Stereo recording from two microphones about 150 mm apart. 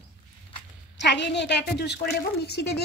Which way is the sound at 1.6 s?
90° left.